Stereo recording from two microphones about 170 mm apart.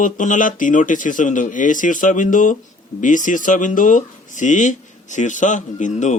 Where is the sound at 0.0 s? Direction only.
50° left (ahead or behind).